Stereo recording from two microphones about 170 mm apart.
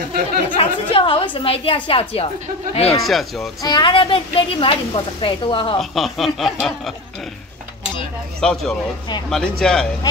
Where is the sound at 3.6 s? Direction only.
25° left (ahead or behind).